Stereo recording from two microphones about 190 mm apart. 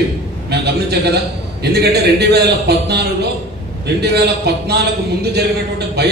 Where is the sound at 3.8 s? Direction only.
60° right (ahead or behind).